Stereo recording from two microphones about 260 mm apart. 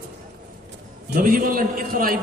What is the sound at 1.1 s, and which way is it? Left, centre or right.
A man's voice, right.